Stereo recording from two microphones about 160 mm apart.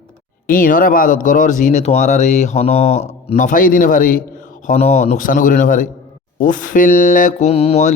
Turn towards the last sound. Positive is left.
turn(degrees=45)  # may be behind; listen again after turning